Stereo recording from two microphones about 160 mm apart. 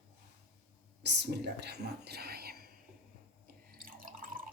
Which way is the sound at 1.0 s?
90° right.